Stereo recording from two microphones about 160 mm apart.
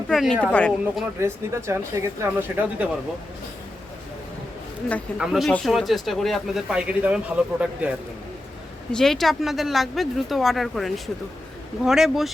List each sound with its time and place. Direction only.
0.1 s a sound: centre (ahead or behind)
0.4 s speech: 5° left (ahead or behind)
1.2 s speech: 15° right (ahead or behind)
5.1 s speech: centre (ahead or behind)